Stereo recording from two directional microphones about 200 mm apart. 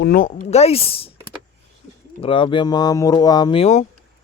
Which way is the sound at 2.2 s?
25° left (ahead or behind).